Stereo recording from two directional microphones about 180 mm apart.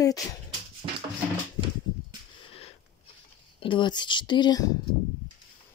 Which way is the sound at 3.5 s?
30° left (ahead or behind).